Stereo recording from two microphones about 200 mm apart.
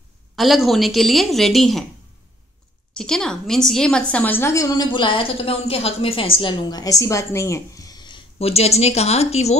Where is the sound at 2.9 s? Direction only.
5° left (ahead or behind).